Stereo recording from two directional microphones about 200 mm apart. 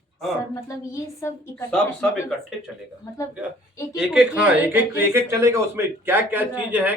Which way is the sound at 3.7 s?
15° left (ahead or behind).